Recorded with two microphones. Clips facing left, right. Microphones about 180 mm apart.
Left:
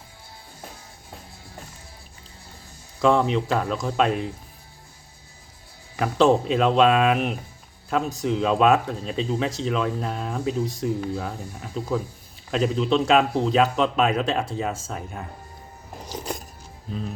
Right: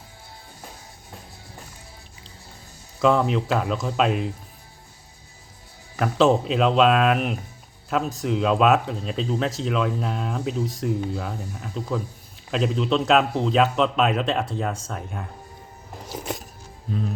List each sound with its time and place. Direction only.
3.0 s speech: centre (ahead or behind)
6.0 s speech: centre (ahead or behind)
16.0 s music: centre (ahead or behind)